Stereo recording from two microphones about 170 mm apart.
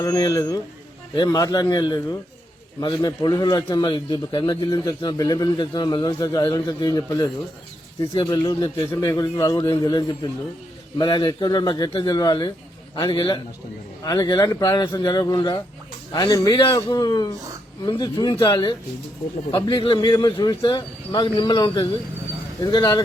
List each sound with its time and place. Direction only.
0.0 s a man's voice: 20° left (ahead or behind)